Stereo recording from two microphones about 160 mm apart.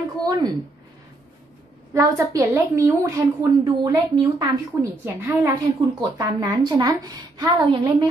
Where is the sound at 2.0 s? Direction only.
20° right (ahead or behind).